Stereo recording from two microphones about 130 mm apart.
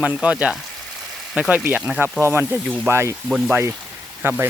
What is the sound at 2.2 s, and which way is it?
Speech, 20° right (ahead or behind).